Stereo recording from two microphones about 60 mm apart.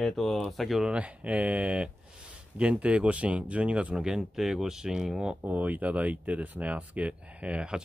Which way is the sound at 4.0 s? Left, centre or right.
Centre.